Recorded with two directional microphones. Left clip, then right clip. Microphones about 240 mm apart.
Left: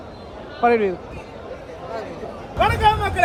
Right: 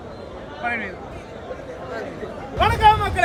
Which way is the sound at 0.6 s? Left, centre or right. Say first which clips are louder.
Left 9 dB; centre.